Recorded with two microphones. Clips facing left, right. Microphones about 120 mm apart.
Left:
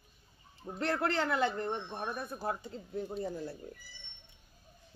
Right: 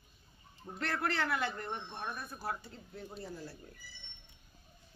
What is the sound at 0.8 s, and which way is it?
Speech, 25° left (ahead or behind).